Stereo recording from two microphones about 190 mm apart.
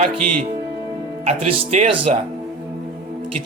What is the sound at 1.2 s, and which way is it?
Speech, 35° right (ahead or behind).